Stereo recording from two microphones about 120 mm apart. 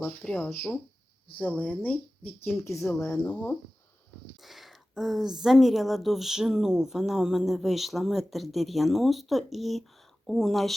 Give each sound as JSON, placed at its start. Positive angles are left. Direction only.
{"t": 0.2, "sound": "speech", "side_deg": 5}
{"t": 3.2, "sound": "speech", "side_deg": 10}
{"t": 4.4, "sound": "a sound", "side_deg": 0}
{"t": 5.4, "sound": "speech", "side_deg": 0}